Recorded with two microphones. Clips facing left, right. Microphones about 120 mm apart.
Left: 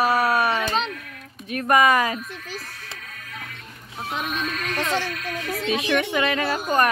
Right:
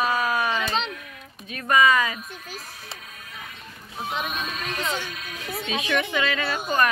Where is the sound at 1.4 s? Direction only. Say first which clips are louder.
Left 2 dB; 50° left (ahead or behind).